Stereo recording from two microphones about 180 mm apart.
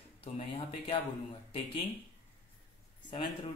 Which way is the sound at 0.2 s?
30° left (ahead or behind).